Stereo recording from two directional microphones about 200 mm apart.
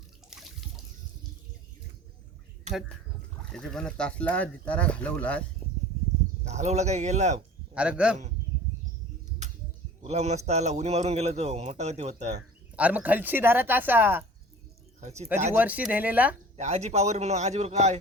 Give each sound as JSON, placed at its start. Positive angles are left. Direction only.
{"t": 3.5, "sound": "speech", "side_deg": 5}
{"t": 6.4, "sound": "a man's voice", "side_deg": -35}
{"t": 7.7, "sound": "a man's voice", "side_deg": -5}
{"t": 10.0, "sound": "a man's voice", "side_deg": -35}
{"t": 12.7, "sound": "speech", "side_deg": -5}
{"t": 15.0, "sound": "speech", "side_deg": -35}
{"t": 15.5, "sound": "speech", "side_deg": -10}
{"t": 16.6, "sound": "a man's voice", "side_deg": -35}